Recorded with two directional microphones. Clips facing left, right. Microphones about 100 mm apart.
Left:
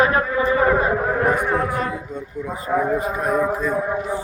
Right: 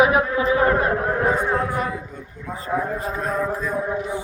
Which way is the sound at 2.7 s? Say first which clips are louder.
Left 4 dB; 5° left (ahead or behind).